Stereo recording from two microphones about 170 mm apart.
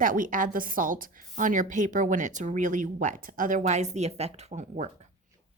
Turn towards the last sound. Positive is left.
turn(degrees=-45)  # may be behind; listen again after turning